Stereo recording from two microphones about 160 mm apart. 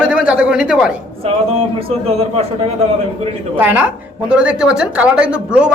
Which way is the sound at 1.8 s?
35° right (ahead or behind).